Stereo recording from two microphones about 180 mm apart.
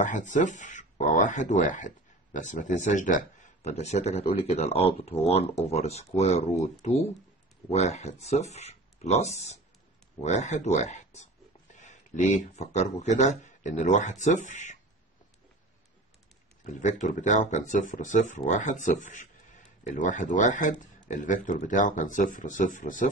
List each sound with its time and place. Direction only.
0.0 s speech: 45° left (ahead or behind)
16.8 s speech: 45° left (ahead or behind)